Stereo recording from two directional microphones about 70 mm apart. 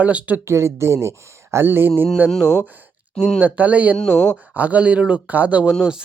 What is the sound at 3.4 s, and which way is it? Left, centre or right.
Speech, right.